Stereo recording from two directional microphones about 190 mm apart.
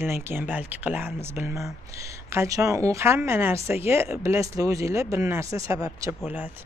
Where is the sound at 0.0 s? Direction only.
10° right (ahead or behind).